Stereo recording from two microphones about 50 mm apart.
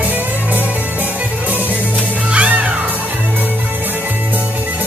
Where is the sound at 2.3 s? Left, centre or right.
Right.